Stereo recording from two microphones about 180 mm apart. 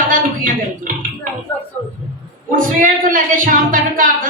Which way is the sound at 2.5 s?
50° right (ahead or behind).